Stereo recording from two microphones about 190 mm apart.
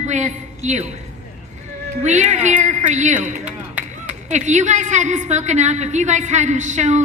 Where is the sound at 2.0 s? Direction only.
40° right (ahead or behind).